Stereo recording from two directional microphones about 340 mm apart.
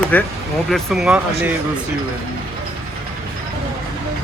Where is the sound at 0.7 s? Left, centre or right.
Centre.